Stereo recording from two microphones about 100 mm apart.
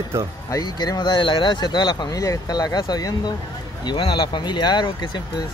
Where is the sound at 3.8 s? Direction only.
60° left (ahead or behind).